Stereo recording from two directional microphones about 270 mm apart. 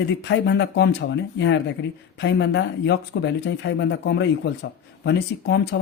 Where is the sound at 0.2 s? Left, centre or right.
Left.